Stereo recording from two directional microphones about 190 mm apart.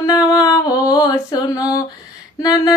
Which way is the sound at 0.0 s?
20° left (ahead or behind).